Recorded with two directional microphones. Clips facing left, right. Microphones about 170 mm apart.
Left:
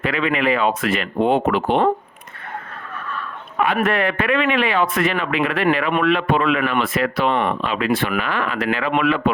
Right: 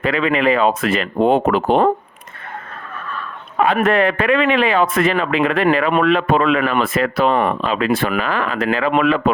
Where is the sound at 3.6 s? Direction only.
30° right (ahead or behind).